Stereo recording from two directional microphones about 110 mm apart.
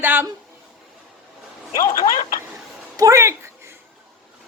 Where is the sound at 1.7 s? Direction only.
30° left (ahead or behind).